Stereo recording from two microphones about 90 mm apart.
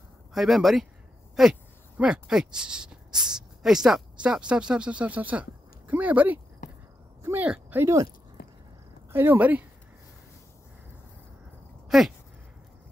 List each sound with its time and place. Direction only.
0.3 s speech: 5° right (ahead or behind)
7.4 s speech: 15° right (ahead or behind)
7.8 s speech: 35° right (ahead or behind)
9.1 s speech: 25° right (ahead or behind)
11.9 s speech: 5° right (ahead or behind)